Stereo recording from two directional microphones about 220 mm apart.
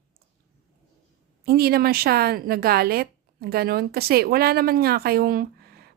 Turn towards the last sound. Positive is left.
turn(degrees=-45)  # may be behind; listen again after turning